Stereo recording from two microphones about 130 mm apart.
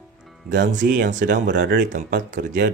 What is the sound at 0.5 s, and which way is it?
Speech, 80° right.